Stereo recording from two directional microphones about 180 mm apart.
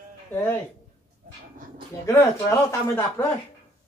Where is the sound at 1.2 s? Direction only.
50° right (ahead or behind).